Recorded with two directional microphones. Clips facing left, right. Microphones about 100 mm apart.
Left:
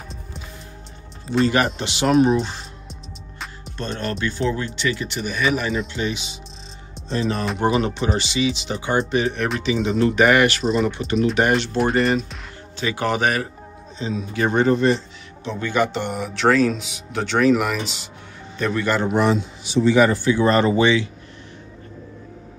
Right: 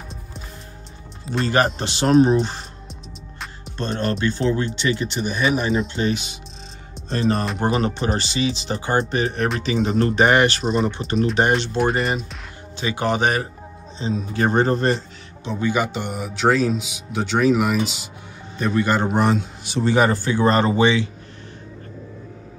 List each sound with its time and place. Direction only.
1.5 s speech: 35° right (ahead or behind)
2.9 s music: centre (ahead or behind)
3.7 s speech: 35° right (ahead or behind)
7.0 s music: centre (ahead or behind)
7.6 s a man's voice: 40° right (ahead or behind)
10.1 s speech: 30° right (ahead or behind)
11.8 s speech: centre (ahead or behind)
12.7 s speech: 20° right (ahead or behind)
14.1 s speech: 40° right (ahead or behind)
15.4 s a man's voice: 10° right (ahead or behind)
18.6 s speech: 20° right (ahead or behind)
19.0 s a man's voice: 45° right (ahead or behind)
20.0 s speech: 30° right (ahead or behind)